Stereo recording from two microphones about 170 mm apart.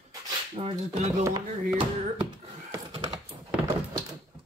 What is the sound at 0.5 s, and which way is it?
Speech, 30° right (ahead or behind).